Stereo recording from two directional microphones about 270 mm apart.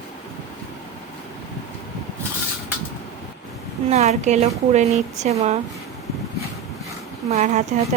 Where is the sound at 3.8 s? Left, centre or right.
Right.